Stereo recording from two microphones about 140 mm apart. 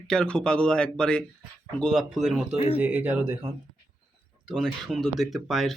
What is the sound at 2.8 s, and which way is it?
Speech, 10° right (ahead or behind).